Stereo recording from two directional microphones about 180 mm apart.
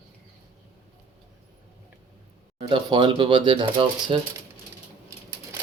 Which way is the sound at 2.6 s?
25° right (ahead or behind).